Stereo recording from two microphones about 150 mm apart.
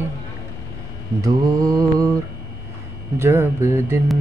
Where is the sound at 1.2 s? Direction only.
25° right (ahead or behind).